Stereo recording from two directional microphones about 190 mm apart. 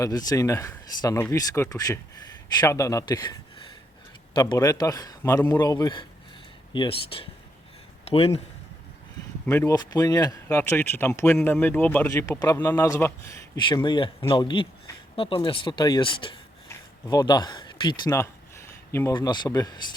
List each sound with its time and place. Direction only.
0.0 s a man's voice: 20° left (ahead or behind)
4.4 s a man's voice: 20° left (ahead or behind)
9.5 s speech: 15° left (ahead or behind)
13.6 s a man's voice: 25° left (ahead or behind)